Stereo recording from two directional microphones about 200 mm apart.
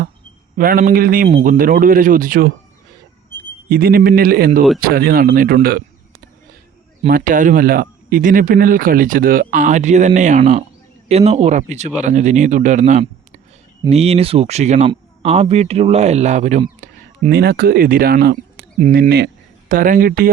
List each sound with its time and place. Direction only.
0.5 s speech: 45° right (ahead or behind)
3.7 s speech: 45° right (ahead or behind)
7.1 s a man's voice: 40° right (ahead or behind)